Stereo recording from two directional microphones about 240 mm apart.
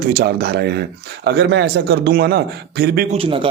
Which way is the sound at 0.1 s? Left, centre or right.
Right.